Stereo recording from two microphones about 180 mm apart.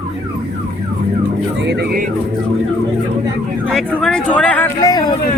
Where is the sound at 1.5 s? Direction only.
75° right (ahead or behind).